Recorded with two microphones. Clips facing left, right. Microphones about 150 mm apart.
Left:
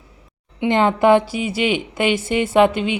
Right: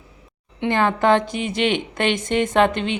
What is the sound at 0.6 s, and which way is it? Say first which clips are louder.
A woman's voice: left 3 dB; 20° left (ahead or behind).